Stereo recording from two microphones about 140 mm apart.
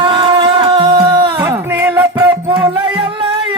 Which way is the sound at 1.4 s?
15° right (ahead or behind).